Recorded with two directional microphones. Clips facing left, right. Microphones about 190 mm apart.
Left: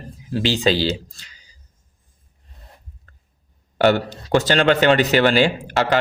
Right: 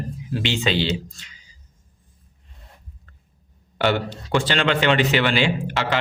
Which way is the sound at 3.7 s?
45° left (ahead or behind).